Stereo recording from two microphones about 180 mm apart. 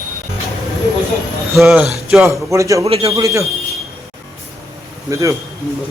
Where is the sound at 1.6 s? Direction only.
Centre (ahead or behind).